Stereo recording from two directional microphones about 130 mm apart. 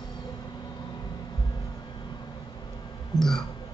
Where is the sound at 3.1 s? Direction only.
20° right (ahead or behind).